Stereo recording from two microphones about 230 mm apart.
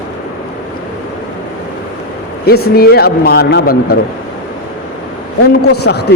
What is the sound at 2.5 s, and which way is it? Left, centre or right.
A man's voice, left.